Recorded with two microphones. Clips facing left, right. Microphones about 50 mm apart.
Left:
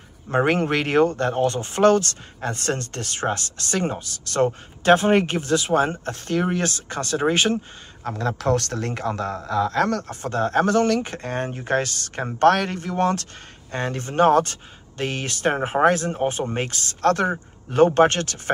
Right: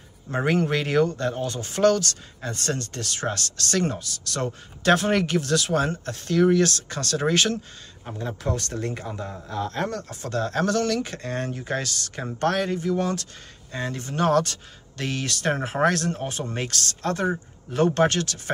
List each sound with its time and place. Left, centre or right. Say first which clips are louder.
0.3 s speech: left 3 dB; left
4.0 s speech: left 8 dB; left
8.0 s speech: left 6 dB; left
9.9 s speech: left 3 dB; left
17.0 s speech: left 7 dB; left
17.7 s speech: left 5 dB; left